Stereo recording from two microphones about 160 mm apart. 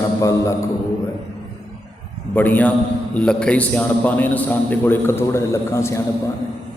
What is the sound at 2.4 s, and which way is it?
A man's voice, 10° left (ahead or behind).